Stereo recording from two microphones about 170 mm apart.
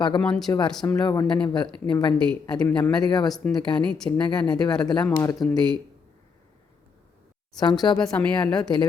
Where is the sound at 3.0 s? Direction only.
25° left (ahead or behind).